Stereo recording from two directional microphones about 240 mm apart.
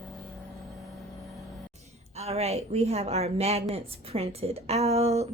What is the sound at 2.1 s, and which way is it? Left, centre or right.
A woman's voice, right.